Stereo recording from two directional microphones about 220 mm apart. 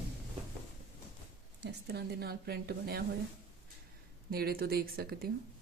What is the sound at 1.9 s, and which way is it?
Speech, 50° right (ahead or behind).